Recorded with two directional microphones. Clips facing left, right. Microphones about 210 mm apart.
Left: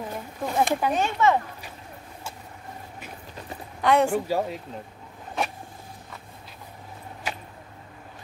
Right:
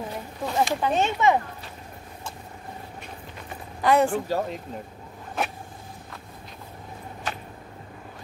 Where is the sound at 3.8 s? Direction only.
Centre (ahead or behind).